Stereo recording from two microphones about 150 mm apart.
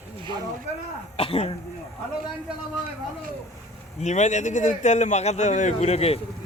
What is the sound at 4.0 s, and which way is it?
A man's voice, 50° left (ahead or behind).